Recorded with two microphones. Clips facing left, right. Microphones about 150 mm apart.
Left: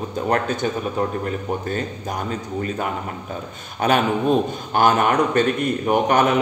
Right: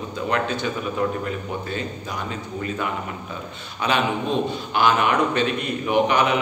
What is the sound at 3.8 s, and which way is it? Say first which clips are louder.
A man's voice: left 4 dB; 45° left (ahead or behind).